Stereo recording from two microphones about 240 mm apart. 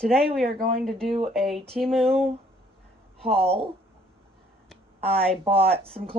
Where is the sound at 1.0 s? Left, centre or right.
Right.